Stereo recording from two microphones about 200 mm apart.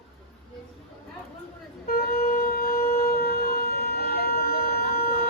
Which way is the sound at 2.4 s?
50° left (ahead or behind).